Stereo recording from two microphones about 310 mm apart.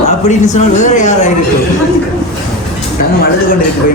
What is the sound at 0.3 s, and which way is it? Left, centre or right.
A man's voice, left.